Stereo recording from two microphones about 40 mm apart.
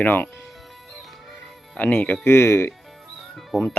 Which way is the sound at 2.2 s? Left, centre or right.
Left.